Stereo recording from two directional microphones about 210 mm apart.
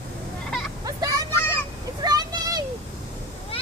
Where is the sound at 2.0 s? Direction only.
20° right (ahead or behind).